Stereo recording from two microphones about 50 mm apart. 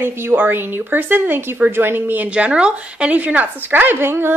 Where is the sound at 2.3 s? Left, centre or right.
Right.